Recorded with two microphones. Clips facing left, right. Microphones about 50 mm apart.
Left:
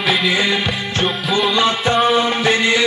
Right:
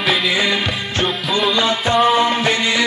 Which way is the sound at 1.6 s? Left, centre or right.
Left.